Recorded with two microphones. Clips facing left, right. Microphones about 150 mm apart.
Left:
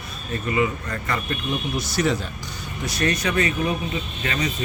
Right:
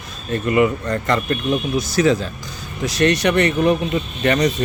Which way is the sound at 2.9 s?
85° right.